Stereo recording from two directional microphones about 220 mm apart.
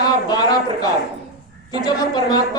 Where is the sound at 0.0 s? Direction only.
20° left (ahead or behind).